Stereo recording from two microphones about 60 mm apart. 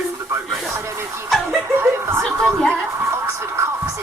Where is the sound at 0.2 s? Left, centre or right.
Right.